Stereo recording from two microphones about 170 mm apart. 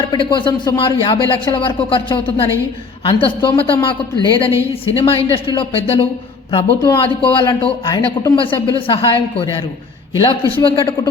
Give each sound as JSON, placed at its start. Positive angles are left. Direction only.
{"t": 0.1, "sound": "a man's voice", "side_deg": 25}
{"t": 4.9, "sound": "a man's voice", "side_deg": 35}